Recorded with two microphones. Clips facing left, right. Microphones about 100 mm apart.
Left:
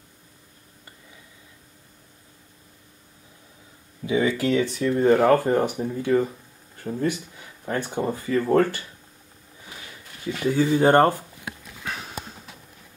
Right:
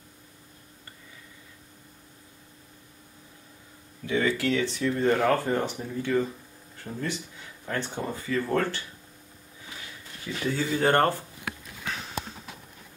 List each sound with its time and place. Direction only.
4.0 s speech: 15° left (ahead or behind)
10.4 s speech: 15° left (ahead or behind)